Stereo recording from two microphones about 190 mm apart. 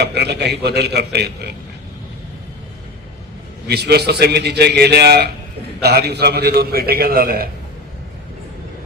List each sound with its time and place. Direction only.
0.0 s a man's voice: 60° right (ahead or behind)
3.7 s a man's voice: 60° right (ahead or behind)